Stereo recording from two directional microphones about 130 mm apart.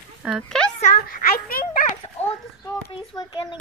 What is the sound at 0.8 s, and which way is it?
Speech, 90° left.